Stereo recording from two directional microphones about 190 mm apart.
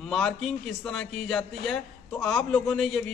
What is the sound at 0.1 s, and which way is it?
A man's voice, centre (ahead or behind).